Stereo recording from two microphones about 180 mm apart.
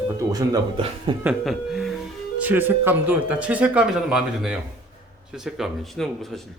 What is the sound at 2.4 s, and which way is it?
Speech, 10° right (ahead or behind).